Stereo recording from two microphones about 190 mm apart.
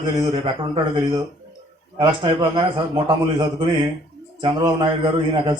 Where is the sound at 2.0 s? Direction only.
25° right (ahead or behind).